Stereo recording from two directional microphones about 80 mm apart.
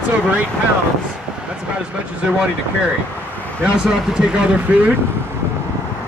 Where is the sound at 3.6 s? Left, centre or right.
Centre.